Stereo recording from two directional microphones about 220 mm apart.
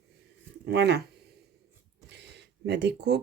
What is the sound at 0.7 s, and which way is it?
Speech, 50° right (ahead or behind).